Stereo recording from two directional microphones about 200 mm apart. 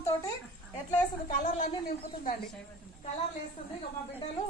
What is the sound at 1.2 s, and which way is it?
A woman's voice, 40° left (ahead or behind).